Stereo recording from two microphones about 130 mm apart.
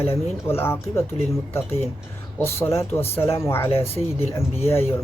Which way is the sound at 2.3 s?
20° left (ahead or behind).